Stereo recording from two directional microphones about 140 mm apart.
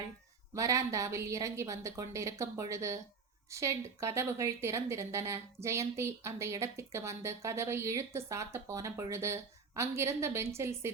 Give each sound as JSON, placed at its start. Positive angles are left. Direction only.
{"t": 0.5, "sound": "a woman's voice", "side_deg": -20}